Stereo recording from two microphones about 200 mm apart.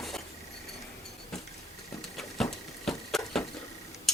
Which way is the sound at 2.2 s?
Centre (ahead or behind).